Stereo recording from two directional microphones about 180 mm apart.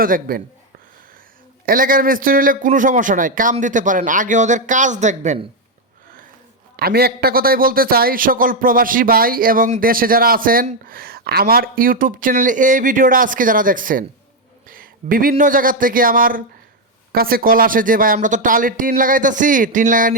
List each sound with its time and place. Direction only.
0.0 s a man's voice: 55° right (ahead or behind)
1.6 s a man's voice: 50° right (ahead or behind)
6.7 s a man's voice: 60° right (ahead or behind)